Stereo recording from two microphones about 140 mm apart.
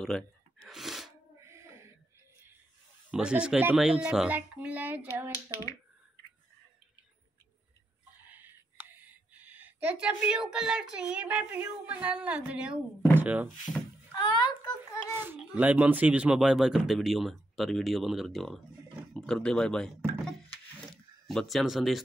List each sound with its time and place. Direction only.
0.0 s gasp: centre (ahead or behind)
1.4 s a sound: 20° right (ahead or behind)
3.1 s speech: 5° right (ahead or behind)
8.3 s speech: 15° right (ahead or behind)
14.1 s a child's voice: 30° left (ahead or behind)
15.5 s speech: 10° right (ahead or behind)